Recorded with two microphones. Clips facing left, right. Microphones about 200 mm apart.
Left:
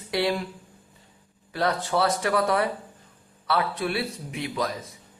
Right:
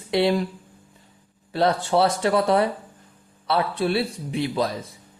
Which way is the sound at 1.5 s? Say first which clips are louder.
Right 5 dB; 30° right (ahead or behind).